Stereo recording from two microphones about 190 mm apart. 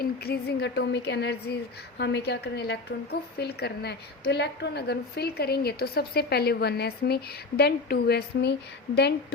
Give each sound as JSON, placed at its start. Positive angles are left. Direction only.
{"t": 0.0, "sound": "a woman's voice", "side_deg": 55}